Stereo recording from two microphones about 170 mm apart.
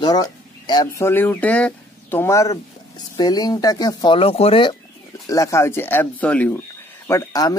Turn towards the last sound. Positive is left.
turn(degrees=20)  # may be behind; listen again after turning